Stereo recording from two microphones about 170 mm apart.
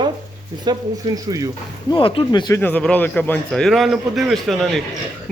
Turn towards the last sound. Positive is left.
turn(degrees=0)  # may be behind; listen again after turning